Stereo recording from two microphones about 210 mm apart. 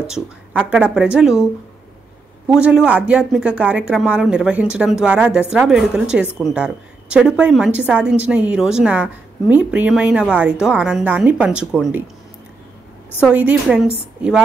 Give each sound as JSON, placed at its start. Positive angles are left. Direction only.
{"t": 0.0, "sound": "a woman's voice", "side_deg": -5}
{"t": 2.5, "sound": "a woman's voice", "side_deg": -5}
{"t": 13.2, "sound": "a woman's voice", "side_deg": -5}